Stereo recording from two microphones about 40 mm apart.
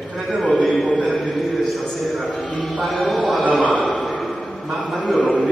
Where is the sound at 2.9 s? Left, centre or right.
Centre.